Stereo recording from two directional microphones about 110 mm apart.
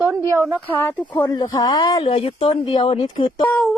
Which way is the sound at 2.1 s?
60° left (ahead or behind).